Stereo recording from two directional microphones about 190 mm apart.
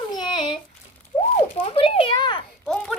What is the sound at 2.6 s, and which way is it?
Speech, 5° left (ahead or behind).